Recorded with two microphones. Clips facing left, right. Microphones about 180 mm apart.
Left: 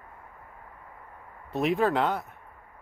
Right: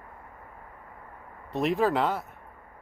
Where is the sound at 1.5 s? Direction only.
Centre (ahead or behind).